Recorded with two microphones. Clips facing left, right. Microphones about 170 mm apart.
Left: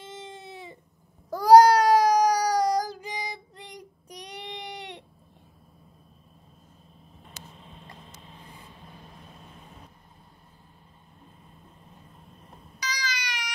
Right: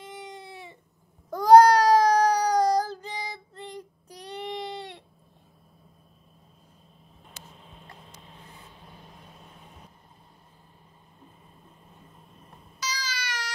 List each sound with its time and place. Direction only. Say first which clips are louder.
0.3 s a sound: left 1 dB; 20° left (ahead or behind)
1.3 s child singing: even; 5° left (ahead or behind)
13.0 s baby cry: left 1 dB; 15° left (ahead or behind)